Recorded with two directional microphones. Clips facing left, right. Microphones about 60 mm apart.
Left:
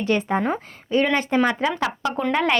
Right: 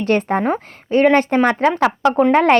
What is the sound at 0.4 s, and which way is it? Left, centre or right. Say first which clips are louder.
A woman's voice: right 5 dB; right.